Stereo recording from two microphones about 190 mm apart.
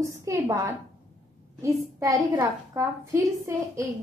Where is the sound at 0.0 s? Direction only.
15° right (ahead or behind).